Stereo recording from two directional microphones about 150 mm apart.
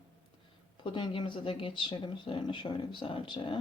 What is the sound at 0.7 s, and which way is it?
Speech, 30° left (ahead or behind).